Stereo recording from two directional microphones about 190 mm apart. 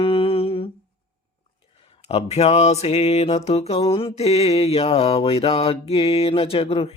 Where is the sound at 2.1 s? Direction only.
35° left (ahead or behind).